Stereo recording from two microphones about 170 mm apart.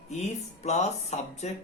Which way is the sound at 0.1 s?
40° left (ahead or behind).